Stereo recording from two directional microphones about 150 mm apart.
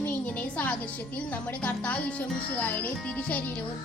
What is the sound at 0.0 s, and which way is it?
Music, 10° left (ahead or behind).